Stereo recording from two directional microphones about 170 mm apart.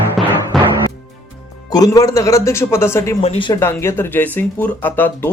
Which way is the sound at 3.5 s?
15° left (ahead or behind).